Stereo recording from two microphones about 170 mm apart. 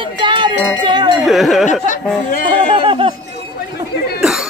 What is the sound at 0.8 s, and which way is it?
Cowbell, 25° right (ahead or behind).